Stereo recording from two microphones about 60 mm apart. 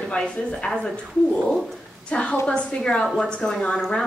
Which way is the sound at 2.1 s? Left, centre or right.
Centre.